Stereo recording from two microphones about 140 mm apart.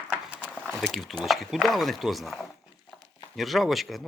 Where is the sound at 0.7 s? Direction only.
Centre (ahead or behind).